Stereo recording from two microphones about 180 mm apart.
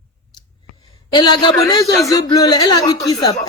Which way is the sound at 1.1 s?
25° left (ahead or behind).